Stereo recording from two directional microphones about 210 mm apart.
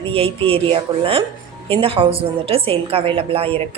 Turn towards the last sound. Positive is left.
turn(degrees=-25)  # may be behind; listen again after turning